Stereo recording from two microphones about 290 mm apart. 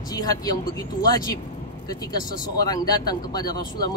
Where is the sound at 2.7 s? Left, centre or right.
Centre.